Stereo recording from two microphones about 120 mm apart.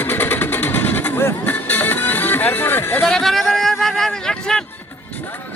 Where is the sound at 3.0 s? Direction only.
5° left (ahead or behind).